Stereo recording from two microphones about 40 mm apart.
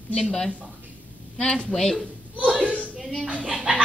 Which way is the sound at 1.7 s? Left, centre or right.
Centre.